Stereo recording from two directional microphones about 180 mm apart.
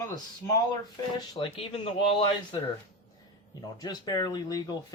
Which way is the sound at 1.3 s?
30° left (ahead or behind).